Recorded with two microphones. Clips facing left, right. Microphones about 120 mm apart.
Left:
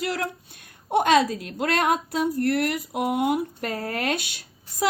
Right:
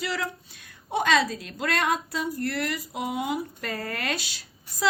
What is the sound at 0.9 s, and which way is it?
A woman's voice, 50° left (ahead or behind).